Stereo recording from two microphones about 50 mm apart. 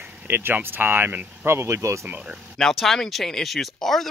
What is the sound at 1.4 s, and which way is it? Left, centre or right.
Speech, right.